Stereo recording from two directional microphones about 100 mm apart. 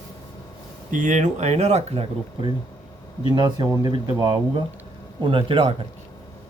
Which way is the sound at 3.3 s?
45° right (ahead or behind).